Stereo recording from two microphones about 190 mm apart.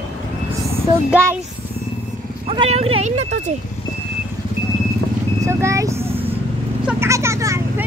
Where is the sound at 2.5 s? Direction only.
30° right (ahead or behind).